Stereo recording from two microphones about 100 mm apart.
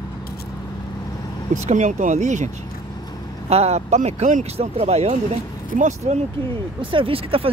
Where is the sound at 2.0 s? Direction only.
90° right.